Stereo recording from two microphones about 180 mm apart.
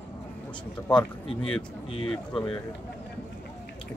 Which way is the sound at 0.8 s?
5° left (ahead or behind).